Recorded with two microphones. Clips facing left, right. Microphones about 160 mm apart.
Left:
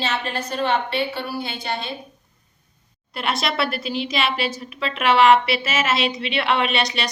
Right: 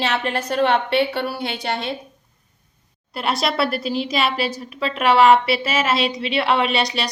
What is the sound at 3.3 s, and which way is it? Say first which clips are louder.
A woman's voice: right 3 dB; 35° right (ahead or behind).